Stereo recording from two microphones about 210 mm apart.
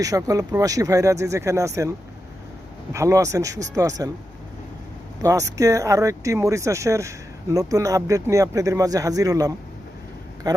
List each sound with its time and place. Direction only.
0.0 s speech: 15° right (ahead or behind)
2.9 s speech: 15° right (ahead or behind)
5.2 s speech: 15° right (ahead or behind)